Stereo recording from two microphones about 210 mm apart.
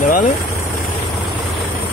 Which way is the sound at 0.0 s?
40° left (ahead or behind).